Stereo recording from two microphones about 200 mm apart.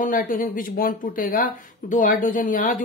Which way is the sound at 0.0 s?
40° left (ahead or behind).